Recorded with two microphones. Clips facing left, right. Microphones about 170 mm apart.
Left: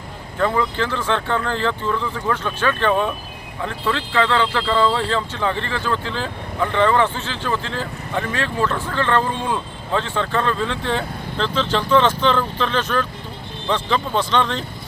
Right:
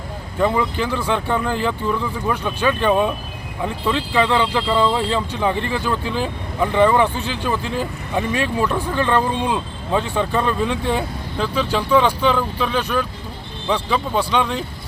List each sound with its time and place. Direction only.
0.3 s speech: 15° right (ahead or behind)